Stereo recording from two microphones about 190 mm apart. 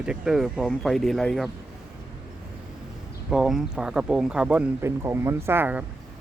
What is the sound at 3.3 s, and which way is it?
Speech, centre (ahead or behind).